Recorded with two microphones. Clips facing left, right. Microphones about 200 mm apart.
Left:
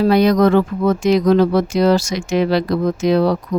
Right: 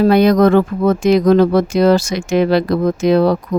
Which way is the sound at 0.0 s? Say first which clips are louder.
Right 2 dB; 55° right (ahead or behind).